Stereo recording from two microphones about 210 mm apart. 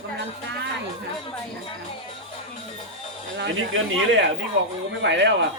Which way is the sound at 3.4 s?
60° right (ahead or behind).